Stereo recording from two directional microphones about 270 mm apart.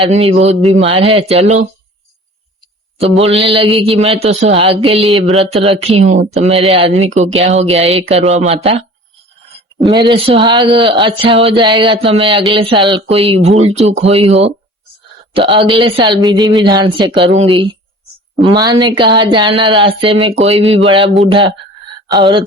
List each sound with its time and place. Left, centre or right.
0.0 s speech: right
3.0 s speech: right